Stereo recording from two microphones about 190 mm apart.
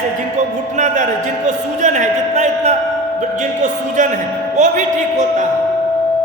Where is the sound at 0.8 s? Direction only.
40° right (ahead or behind).